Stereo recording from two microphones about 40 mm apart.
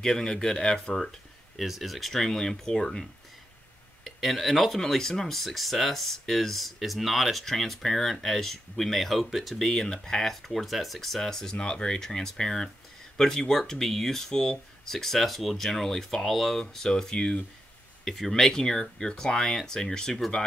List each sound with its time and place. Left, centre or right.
0.0 s speech: centre
1.6 s speech: centre
4.0 s speech: centre
9.7 s speech: centre
11.5 s speech: left